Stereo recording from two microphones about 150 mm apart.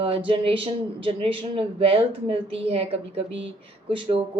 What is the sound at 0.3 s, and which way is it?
Speech, 35° right (ahead or behind).